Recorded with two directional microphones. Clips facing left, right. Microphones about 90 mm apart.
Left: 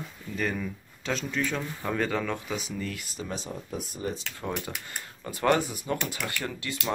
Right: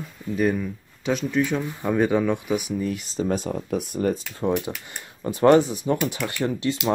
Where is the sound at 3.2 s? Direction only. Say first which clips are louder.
Right 11 dB; 55° right (ahead or behind).